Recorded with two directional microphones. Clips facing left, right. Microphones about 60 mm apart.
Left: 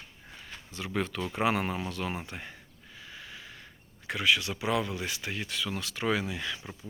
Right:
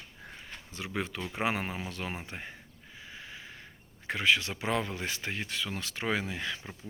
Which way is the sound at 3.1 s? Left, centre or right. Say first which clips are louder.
Even; right.